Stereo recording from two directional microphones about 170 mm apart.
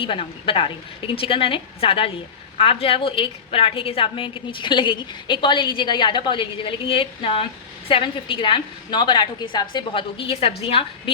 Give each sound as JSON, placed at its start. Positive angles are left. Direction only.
{"t": 0.0, "sound": "a woman's voice", "side_deg": 30}